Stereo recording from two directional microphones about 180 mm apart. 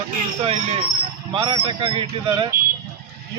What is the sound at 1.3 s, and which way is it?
A man's voice, 30° right (ahead or behind).